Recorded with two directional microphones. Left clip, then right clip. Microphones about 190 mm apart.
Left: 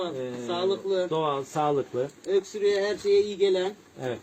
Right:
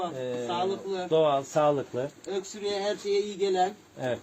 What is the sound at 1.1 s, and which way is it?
Speech, 30° right (ahead or behind).